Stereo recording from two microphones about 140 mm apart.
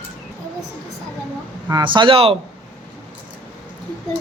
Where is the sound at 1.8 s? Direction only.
35° right (ahead or behind).